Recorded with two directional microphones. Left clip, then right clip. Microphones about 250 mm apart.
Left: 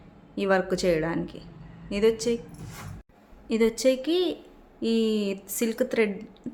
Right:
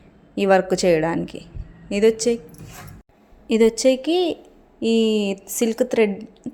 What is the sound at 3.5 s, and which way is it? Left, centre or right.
A woman's voice, right.